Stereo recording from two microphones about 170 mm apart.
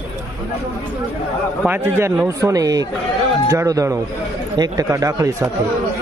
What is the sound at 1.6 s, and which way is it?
Speech, 10° right (ahead or behind).